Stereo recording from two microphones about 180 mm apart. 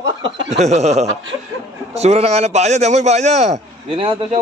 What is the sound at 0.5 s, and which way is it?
A man's voice, 40° right (ahead or behind).